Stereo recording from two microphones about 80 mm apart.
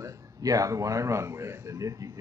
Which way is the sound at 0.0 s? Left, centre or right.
Right.